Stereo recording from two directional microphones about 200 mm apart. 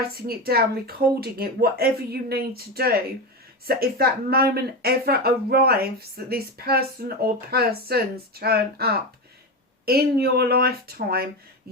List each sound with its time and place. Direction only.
0.1 s speech: 50° right (ahead or behind)